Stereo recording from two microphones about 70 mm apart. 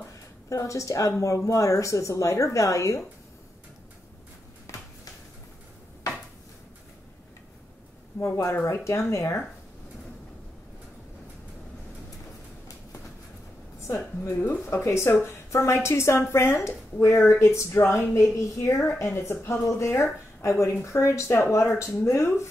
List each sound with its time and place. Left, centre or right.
0.5 s speech: left
8.2 s speech: left
13.8 s speech: left